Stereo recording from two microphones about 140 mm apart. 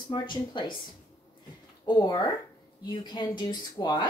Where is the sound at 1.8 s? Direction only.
30° left (ahead or behind).